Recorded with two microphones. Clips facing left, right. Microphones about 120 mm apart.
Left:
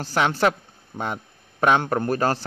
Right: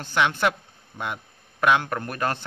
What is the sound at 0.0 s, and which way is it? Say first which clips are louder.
Speech: left 2 dB; 35° left (ahead or behind).